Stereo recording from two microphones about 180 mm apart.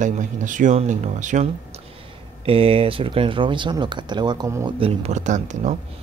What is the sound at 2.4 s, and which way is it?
Speech, 30° right (ahead or behind).